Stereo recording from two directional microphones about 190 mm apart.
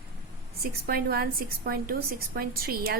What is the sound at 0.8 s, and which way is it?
Speech, 55° right (ahead or behind).